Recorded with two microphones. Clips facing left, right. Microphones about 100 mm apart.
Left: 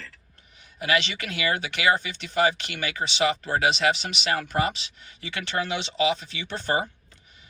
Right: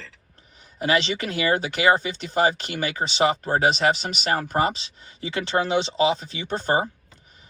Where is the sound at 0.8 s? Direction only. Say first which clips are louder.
Right 3 dB; 35° right (ahead or behind).